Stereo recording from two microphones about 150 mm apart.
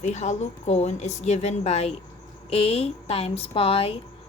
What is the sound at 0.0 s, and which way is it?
A woman's voice, 50° left (ahead or behind).